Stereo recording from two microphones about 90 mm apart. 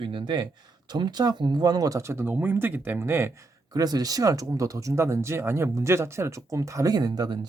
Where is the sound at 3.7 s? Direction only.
45° right (ahead or behind).